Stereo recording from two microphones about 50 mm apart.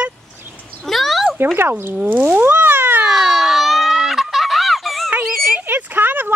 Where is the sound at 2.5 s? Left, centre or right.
Right.